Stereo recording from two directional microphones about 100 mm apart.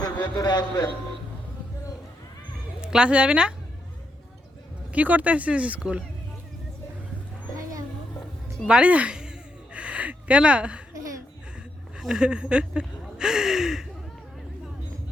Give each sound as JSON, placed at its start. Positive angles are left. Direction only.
{"t": 0.0, "sound": "a man's voice", "side_deg": 45}
{"t": 2.8, "sound": "speech", "side_deg": -10}
{"t": 4.9, "sound": "speech", "side_deg": -15}
{"t": 7.5, "sound": "a sound", "side_deg": -35}
{"t": 8.6, "sound": "a sound", "side_deg": -10}
{"t": 11.9, "sound": "gasp", "side_deg": -5}